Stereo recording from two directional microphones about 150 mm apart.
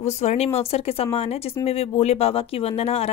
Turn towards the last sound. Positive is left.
turn(degrees=40)  # may be behind; listen again after turning